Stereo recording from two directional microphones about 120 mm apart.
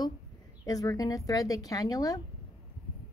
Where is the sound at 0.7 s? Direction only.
30° left (ahead or behind).